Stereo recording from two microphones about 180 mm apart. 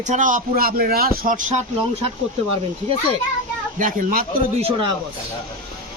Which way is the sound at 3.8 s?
50° right (ahead or behind).